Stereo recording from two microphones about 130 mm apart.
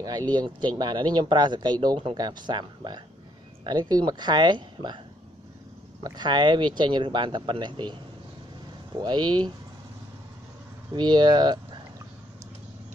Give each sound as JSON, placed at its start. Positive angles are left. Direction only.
{"t": 0.0, "sound": "speech", "side_deg": -30}
{"t": 6.0, "sound": "speech", "side_deg": -35}
{"t": 11.0, "sound": "speech", "side_deg": -35}